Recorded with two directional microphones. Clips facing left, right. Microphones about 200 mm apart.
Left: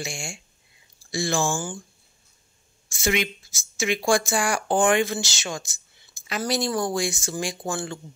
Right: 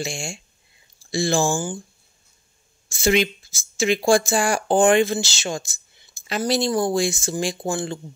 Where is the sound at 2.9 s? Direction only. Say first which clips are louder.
Right 6 dB; 30° right (ahead or behind).